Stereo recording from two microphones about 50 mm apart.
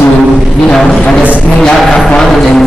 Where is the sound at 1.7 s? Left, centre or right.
Centre.